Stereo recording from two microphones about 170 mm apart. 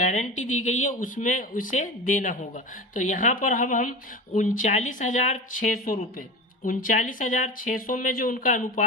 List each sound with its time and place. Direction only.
0.0 s speech: 45° left (ahead or behind)